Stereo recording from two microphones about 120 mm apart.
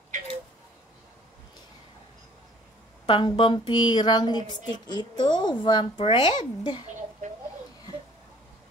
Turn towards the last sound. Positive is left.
turn(degrees=40)  # may be behind; listen again after turning